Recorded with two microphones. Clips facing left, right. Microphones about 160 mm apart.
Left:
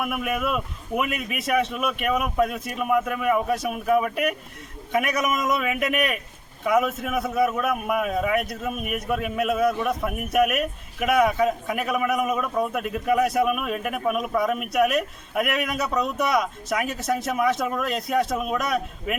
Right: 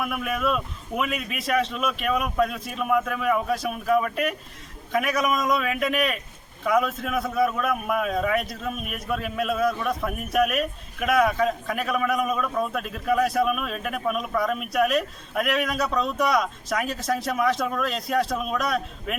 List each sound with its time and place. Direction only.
0.0 s a man's voice: 5° left (ahead or behind)